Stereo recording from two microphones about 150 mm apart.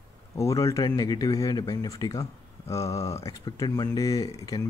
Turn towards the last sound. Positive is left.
turn(degrees=25)  # may be behind; listen again after turning